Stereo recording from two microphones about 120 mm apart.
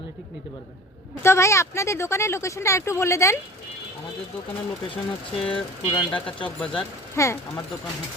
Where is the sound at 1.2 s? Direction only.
25° left (ahead or behind).